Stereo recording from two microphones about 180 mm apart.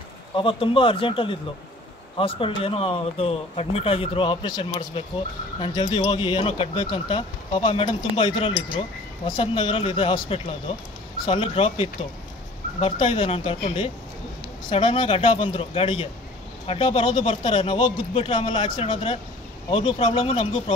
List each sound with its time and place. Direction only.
0.4 s speech: 30° left (ahead or behind)